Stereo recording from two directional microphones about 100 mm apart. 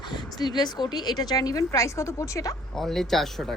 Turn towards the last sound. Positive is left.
turn(degrees=5)  # may be behind; listen again after turning